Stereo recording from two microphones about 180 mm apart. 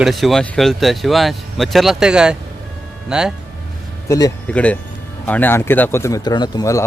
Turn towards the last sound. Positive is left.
turn(degrees=20)  # may be behind; listen again after turning